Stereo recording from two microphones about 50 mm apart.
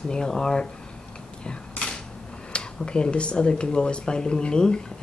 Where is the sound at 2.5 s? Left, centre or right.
Centre.